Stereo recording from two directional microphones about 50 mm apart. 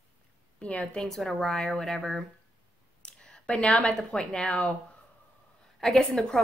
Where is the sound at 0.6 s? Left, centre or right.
Left.